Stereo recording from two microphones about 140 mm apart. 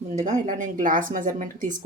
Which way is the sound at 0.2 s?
60° right (ahead or behind).